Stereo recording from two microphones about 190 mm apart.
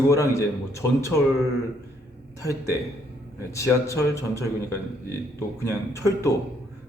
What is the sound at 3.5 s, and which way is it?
Speech, 15° left (ahead or behind).